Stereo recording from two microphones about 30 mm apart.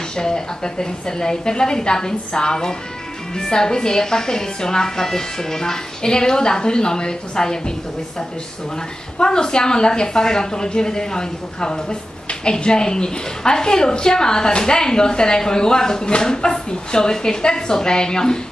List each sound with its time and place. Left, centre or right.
0.1 s a woman's voice: left
9.2 s a woman's voice: left